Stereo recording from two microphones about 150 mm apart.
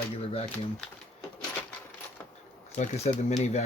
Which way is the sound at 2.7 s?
50° left (ahead or behind).